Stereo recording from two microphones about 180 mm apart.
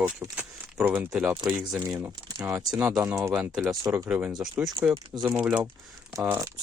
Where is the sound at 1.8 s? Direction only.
20° right (ahead or behind).